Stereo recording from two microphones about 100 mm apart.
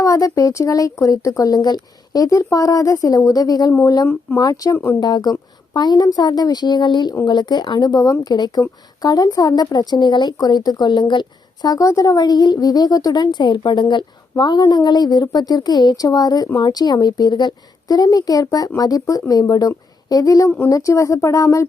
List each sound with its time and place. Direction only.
0.0 s speech: 35° left (ahead or behind)
3.7 s speech: 25° left (ahead or behind)
4.4 s speech: 35° left (ahead or behind)
4.9 s a woman's voice: 45° left (ahead or behind)